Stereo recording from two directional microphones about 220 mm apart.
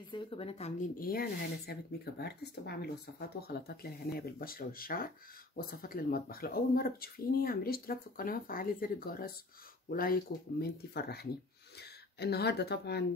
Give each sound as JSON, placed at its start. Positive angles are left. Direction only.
{"t": 0.1, "sound": "speech", "side_deg": 25}